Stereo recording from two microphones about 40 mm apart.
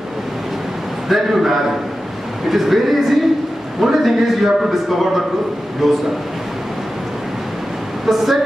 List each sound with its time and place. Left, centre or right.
1.0 s a man's voice: centre
8.0 s a woman's voice: centre